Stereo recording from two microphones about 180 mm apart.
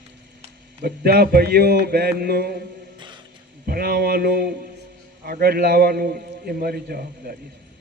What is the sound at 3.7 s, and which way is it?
A man's voice, 55° right (ahead or behind).